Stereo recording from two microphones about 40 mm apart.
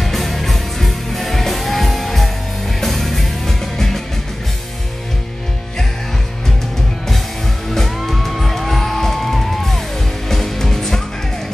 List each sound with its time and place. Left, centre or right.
0.0 s music: centre
7.7 s music: centre